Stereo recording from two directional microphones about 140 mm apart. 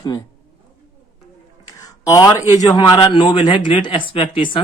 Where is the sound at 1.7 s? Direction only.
25° left (ahead or behind).